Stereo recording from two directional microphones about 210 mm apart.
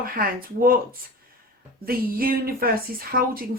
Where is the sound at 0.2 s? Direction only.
45° right (ahead or behind).